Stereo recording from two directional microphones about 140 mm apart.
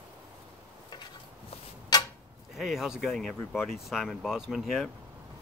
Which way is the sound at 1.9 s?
30° left (ahead or behind).